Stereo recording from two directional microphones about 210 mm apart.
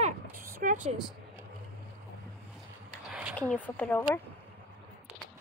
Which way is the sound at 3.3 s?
5° left (ahead or behind).